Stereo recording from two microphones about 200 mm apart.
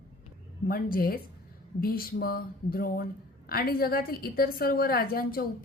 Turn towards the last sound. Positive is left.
turn(degrees=45)  # may be behind; listen again after turning